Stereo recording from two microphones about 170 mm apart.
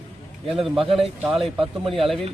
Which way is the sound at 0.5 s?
Centre (ahead or behind).